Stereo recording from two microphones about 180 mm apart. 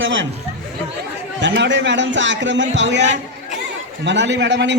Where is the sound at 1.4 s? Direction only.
80° right.